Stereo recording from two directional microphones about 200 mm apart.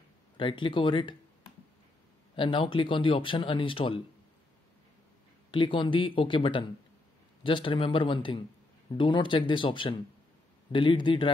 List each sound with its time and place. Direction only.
0.4 s speech: 25° left (ahead or behind)
2.3 s speech: 25° left (ahead or behind)
5.5 s speech: 25° left (ahead or behind)